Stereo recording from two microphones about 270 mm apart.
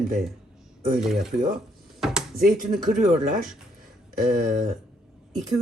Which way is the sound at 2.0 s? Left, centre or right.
Centre.